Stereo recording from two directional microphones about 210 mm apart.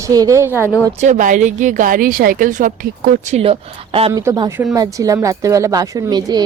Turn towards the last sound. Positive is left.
turn(degrees=-20)  # may be behind; listen again after turning